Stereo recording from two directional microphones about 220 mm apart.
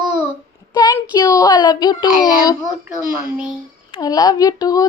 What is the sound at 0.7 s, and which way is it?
Child singing, 20° left (ahead or behind).